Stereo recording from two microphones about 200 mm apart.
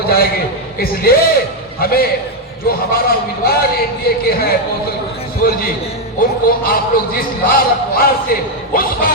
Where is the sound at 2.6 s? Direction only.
50° left (ahead or behind).